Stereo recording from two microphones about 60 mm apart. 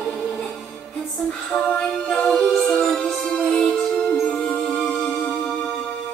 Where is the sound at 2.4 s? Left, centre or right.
Centre.